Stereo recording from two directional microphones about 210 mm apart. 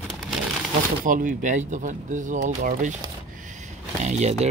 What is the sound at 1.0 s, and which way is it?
Speech, 40° right (ahead or behind).